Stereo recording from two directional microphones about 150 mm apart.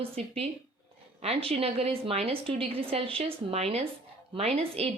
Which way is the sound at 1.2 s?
40° right (ahead or behind).